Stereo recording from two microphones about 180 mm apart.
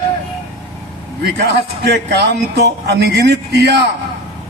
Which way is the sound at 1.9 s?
70° right (ahead or behind).